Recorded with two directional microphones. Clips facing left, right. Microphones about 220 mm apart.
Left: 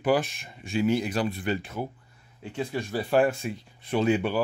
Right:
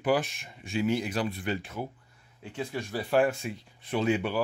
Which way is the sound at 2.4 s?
30° left (ahead or behind).